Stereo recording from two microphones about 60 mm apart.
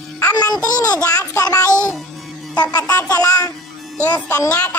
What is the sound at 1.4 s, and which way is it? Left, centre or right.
Child singing, left.